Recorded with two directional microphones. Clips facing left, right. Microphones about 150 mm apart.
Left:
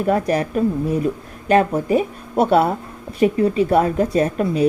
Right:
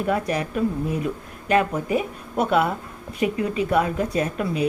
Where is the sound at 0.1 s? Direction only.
40° left (ahead or behind).